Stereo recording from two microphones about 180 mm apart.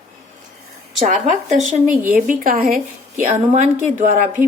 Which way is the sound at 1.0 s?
45° right (ahead or behind).